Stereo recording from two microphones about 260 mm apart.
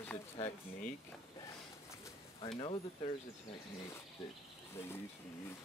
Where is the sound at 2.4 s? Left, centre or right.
Centre.